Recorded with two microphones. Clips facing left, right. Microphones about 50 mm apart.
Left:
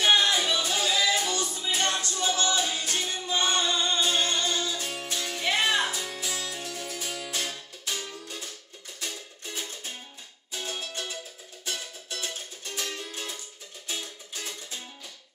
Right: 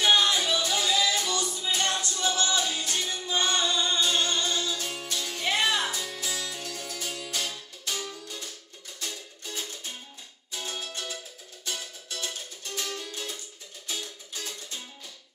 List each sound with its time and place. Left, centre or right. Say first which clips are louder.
0.0 s music: even; left
12.7 s music: even; left